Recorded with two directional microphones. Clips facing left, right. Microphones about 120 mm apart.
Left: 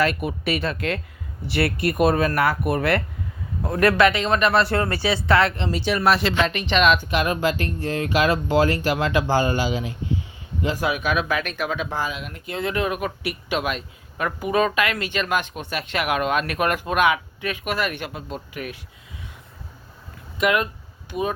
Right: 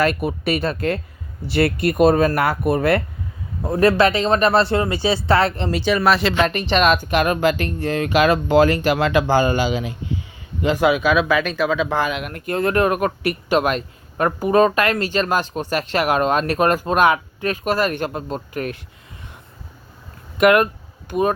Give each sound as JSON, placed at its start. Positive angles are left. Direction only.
{"t": 0.0, "sound": "speech", "side_deg": -40}
{"t": 4.8, "sound": "speech", "side_deg": -15}
{"t": 5.0, "sound": "speech", "side_deg": -30}
{"t": 5.7, "sound": "speech", "side_deg": -90}
{"t": 6.3, "sound": "speech", "side_deg": -45}
{"t": 11.9, "sound": "speech", "side_deg": -70}
{"t": 20.4, "sound": "speech", "side_deg": -60}